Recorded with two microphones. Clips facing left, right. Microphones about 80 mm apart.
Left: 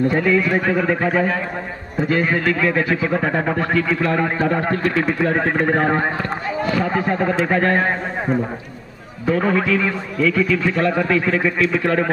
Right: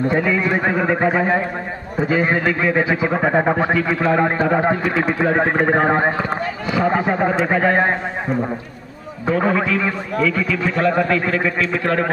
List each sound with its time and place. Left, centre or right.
0.1 s speech: centre
0.4 s speech: right
2.0 s a man's voice: centre
9.3 s speech: centre